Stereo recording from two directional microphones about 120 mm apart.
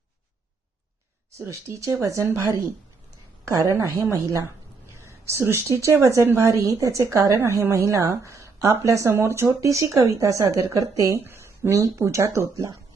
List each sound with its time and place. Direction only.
1.4 s a woman's voice: 25° right (ahead or behind)